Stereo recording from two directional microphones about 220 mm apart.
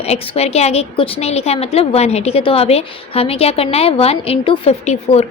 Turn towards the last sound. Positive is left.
turn(degrees=30)  # may be behind; listen again after turning